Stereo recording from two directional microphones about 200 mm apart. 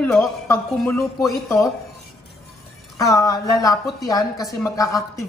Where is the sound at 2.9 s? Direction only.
15° left (ahead or behind).